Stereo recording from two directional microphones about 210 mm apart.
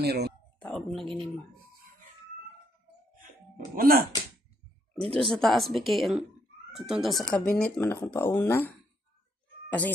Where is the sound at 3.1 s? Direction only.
40° right (ahead or behind).